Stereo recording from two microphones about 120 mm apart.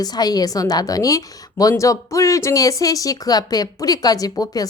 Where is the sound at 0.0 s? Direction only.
35° left (ahead or behind).